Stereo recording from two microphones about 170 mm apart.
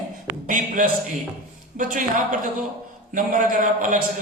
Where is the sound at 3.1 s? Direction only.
50° right (ahead or behind).